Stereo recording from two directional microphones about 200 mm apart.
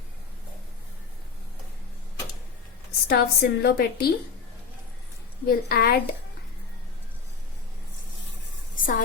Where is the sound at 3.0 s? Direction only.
50° left (ahead or behind).